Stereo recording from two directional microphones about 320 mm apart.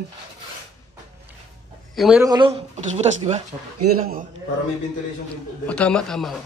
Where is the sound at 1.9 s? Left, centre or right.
Centre; by 3.4 s right.